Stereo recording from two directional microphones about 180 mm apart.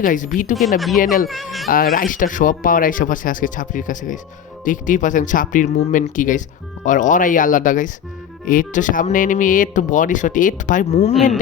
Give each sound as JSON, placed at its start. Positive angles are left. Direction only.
{"t": 0.0, "sound": "speech", "side_deg": 45}
{"t": 0.5, "sound": "speech", "side_deg": 0}
{"t": 1.6, "sound": "speech", "side_deg": 55}
{"t": 11.1, "sound": "speech", "side_deg": 0}